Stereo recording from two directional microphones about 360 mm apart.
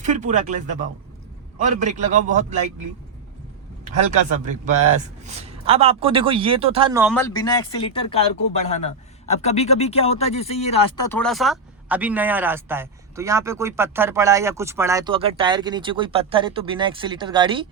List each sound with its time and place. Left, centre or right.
0.0 s a man's voice: centre
1.6 s a man's voice: centre
4.0 s a man's voice: centre
7.1 s speech: centre
9.3 s a man's voice: centre